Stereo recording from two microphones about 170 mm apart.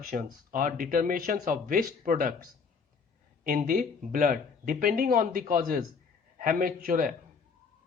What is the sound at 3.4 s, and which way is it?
A man's voice, 55° right (ahead or behind).